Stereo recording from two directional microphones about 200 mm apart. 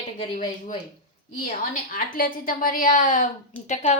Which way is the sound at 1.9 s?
45° left (ahead or behind).